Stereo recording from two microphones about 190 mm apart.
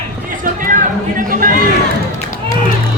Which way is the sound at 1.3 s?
50° right (ahead or behind).